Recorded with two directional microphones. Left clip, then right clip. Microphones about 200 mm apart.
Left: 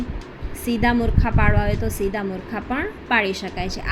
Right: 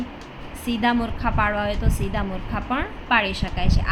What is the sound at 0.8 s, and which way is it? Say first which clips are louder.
A woman's voice: left 1 dB; 10° left (ahead or behind).